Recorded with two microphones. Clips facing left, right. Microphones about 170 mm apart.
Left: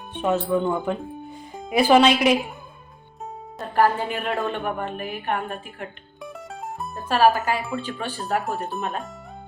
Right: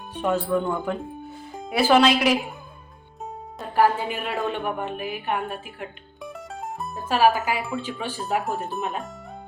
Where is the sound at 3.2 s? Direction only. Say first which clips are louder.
Left 1 dB; centre (ahead or behind).